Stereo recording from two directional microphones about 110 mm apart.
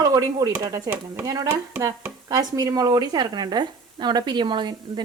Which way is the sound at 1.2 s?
35° right (ahead or behind).